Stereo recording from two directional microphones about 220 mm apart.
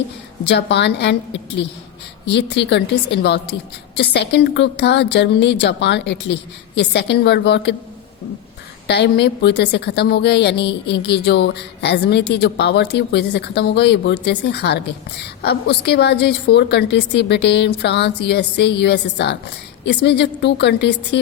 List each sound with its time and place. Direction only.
0.4 s a woman's voice: 50° left (ahead or behind)
8.9 s a woman's voice: 50° left (ahead or behind)